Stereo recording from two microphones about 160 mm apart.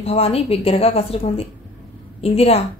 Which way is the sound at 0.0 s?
40° left (ahead or behind).